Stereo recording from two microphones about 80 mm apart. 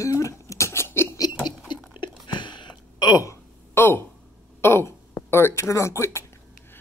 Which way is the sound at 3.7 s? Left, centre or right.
Left.